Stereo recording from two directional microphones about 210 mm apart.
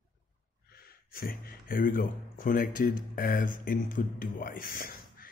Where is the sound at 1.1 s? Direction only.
45° left (ahead or behind).